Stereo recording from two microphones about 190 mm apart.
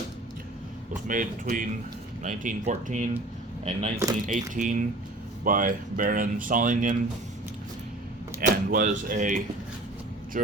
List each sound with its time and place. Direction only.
1.0 s speech: 45° right (ahead or behind)
8.4 s speech: 45° right (ahead or behind)